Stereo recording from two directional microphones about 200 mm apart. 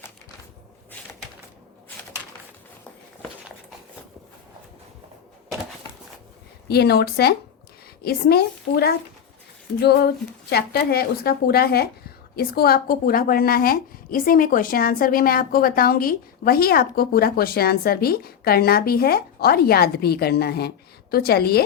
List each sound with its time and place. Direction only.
6.7 s speech: 55° left (ahead or behind)